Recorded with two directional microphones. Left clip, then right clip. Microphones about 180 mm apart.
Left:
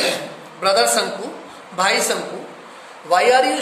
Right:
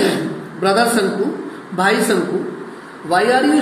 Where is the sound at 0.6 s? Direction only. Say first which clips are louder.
Right 1 dB; 45° left (ahead or behind).